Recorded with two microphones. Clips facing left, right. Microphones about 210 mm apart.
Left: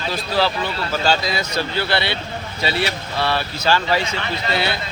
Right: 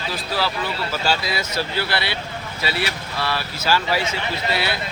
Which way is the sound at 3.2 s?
25° left (ahead or behind).